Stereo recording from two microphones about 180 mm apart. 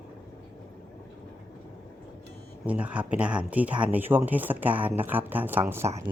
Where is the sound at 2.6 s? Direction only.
5° right (ahead or behind).